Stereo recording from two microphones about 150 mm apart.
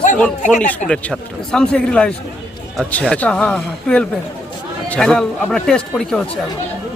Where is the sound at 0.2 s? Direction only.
10° left (ahead or behind).